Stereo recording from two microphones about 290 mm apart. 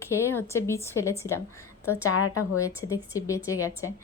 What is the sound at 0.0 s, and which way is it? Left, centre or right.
A woman's voice, centre.